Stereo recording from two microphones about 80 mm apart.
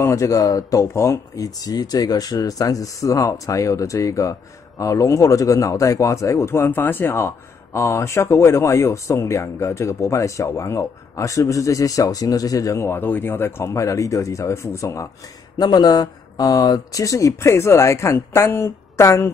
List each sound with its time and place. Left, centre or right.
0.0 s speech: left
13.7 s speech: left
15.5 s speech: left